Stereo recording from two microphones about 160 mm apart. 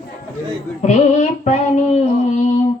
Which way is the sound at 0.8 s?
50° left (ahead or behind).